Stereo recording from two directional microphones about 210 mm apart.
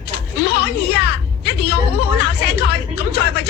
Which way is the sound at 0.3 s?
50° left (ahead or behind).